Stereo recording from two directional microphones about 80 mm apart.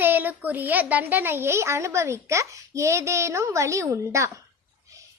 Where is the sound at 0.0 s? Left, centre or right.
Right.